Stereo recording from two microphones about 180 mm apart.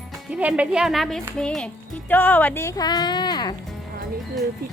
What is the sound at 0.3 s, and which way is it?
A woman's voice, 5° right (ahead or behind).